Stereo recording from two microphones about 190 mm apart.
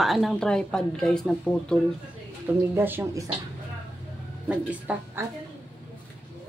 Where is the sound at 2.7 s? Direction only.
10° right (ahead or behind).